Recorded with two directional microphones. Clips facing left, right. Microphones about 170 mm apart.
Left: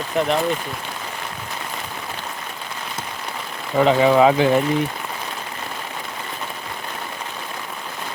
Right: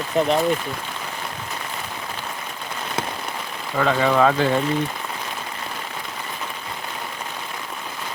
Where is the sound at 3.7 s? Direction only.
20° left (ahead or behind).